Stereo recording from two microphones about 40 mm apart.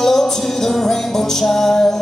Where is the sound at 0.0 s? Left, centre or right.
Centre.